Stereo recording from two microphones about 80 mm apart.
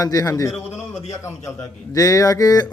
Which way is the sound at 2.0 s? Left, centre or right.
Left.